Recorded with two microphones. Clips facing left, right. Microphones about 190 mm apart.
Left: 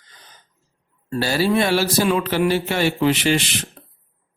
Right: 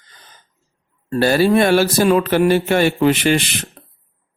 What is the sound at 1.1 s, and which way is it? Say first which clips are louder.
Speech: right 5 dB; 55° right (ahead or behind).